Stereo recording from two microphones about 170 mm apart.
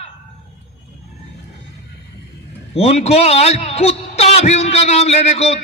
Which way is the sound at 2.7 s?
35° left (ahead or behind).